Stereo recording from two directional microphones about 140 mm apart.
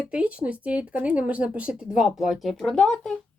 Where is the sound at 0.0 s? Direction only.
10° right (ahead or behind).